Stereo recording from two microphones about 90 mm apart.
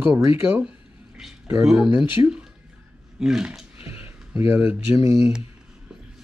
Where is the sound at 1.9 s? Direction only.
65° left (ahead or behind).